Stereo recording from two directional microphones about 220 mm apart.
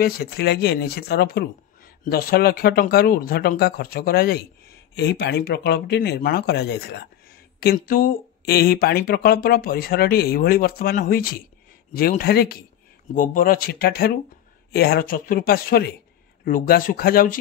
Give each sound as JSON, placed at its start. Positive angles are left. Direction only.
{"t": 0.0, "sound": "speech", "side_deg": 45}